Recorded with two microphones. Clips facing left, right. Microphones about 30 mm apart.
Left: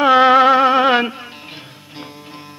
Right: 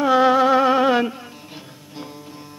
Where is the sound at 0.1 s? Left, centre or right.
Left.